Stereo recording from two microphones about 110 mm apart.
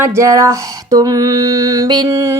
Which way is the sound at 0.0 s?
30° right (ahead or behind).